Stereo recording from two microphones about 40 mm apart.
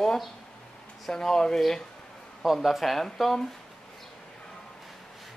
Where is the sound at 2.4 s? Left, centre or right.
Centre.